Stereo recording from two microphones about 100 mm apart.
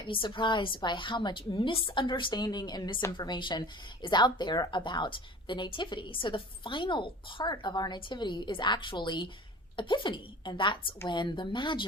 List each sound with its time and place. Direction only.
0.1 s a woman's voice: 55° left (ahead or behind)